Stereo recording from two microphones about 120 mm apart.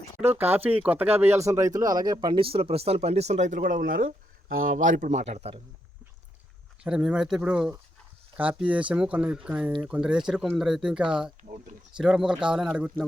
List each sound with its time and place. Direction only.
0.2 s speech: 15° right (ahead or behind); by 5.5 s 60° right (ahead or behind)
6.8 s speech: 10° right (ahead or behind)